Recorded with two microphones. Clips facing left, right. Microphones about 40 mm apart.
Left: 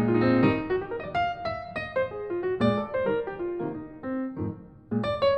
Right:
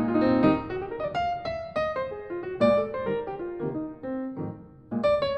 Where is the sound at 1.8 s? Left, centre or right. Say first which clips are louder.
Even; left.